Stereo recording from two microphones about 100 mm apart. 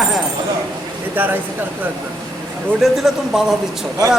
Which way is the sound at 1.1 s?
20° right (ahead or behind).